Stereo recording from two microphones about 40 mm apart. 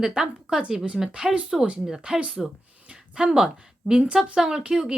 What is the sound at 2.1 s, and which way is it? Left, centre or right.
Speech, right.